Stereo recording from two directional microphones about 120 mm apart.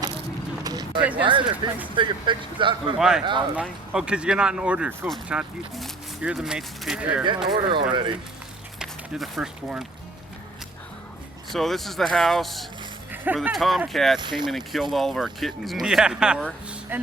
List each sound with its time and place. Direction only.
0.6 s a sound: 30° right (ahead or behind)
1.2 s speech: 45° right (ahead or behind)
3.0 s speech: 5° right (ahead or behind)
7.4 s speech: 35° right (ahead or behind)
8.8 s speech: centre (ahead or behind)
11.5 s speech: centre (ahead or behind); by 17.1 s 15° right (ahead or behind)